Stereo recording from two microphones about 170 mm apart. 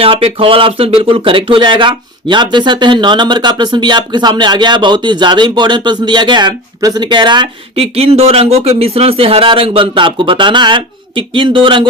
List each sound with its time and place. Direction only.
0.0 s speech: 30° right (ahead or behind)